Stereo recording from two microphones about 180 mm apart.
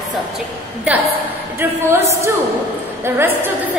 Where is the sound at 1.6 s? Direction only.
15° right (ahead or behind).